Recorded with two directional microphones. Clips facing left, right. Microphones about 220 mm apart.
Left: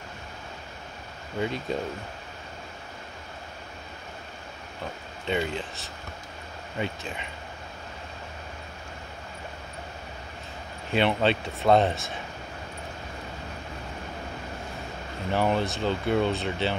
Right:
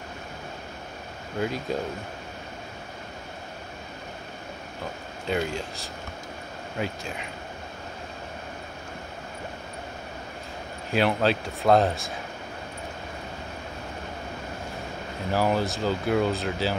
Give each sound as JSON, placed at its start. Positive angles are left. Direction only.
{"t": 1.4, "sound": "speech", "side_deg": 0}
{"t": 5.2, "sound": "speech", "side_deg": 0}
{"t": 6.8, "sound": "speech", "side_deg": 0}
{"t": 10.9, "sound": "speech", "side_deg": 0}
{"t": 15.3, "sound": "speech", "side_deg": -5}